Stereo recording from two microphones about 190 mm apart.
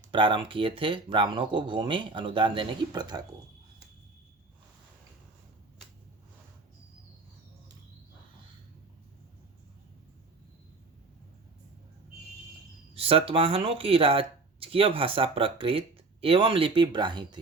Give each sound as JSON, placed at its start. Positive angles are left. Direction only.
{"t": 0.1, "sound": "speech", "side_deg": -25}
{"t": 12.9, "sound": "speech", "side_deg": -30}